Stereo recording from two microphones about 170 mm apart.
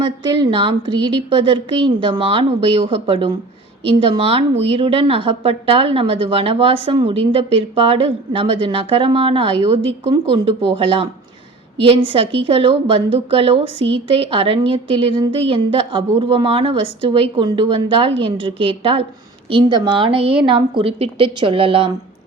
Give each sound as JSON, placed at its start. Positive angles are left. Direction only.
{"t": 0.0, "sound": "a woman's voice", "side_deg": -30}